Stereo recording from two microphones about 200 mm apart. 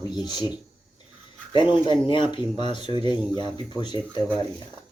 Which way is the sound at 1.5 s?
25° left (ahead or behind).